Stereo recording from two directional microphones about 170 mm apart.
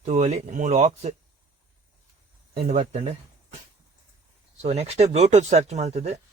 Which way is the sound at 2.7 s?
40° right (ahead or behind).